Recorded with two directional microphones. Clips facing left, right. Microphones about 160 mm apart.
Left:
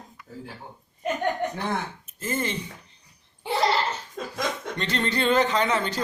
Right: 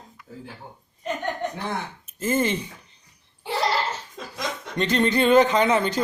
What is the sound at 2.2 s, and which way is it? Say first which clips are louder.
Speech: right 6 dB; 15° right (ahead or behind).